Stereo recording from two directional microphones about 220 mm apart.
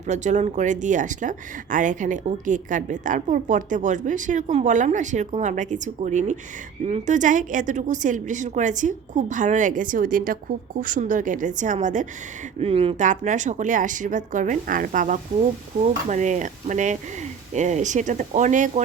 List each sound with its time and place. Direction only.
0.1 s speech: 30° right (ahead or behind)